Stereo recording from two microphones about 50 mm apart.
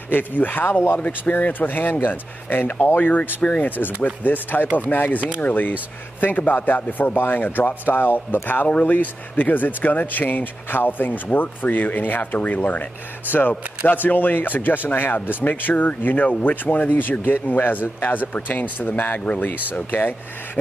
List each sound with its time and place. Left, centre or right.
0.1 s speech: left
0.9 s speech: left